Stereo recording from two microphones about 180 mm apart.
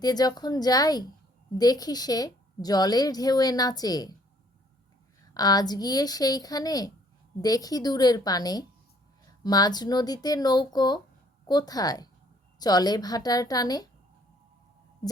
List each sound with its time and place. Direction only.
0.0 s a woman's voice: 20° left (ahead or behind)
5.3 s a woman's voice: 20° left (ahead or behind)